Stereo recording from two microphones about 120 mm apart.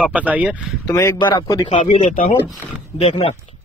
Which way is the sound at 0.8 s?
25° left (ahead or behind).